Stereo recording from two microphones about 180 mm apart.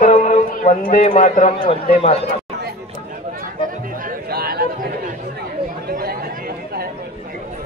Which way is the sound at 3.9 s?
50° right (ahead or behind).